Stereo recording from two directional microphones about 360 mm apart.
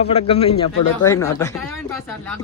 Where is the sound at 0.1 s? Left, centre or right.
Centre.